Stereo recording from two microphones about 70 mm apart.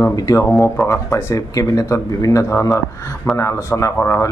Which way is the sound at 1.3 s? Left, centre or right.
Left.